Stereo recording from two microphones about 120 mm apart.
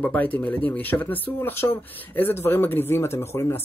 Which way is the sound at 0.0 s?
15° left (ahead or behind).